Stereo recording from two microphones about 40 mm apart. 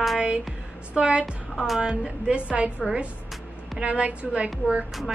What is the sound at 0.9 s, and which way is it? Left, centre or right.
A woman's voice, right.